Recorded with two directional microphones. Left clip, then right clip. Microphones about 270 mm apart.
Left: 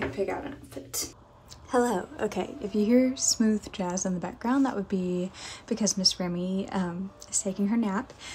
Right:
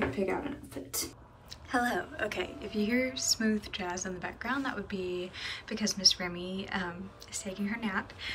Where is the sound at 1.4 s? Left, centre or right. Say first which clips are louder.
Left 5 dB; left.